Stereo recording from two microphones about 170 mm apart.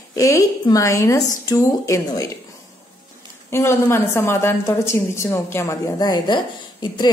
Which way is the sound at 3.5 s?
15° left (ahead or behind).